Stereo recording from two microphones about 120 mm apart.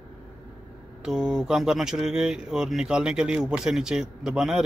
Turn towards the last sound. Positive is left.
turn(degrees=-5)  # may be behind; listen again after turning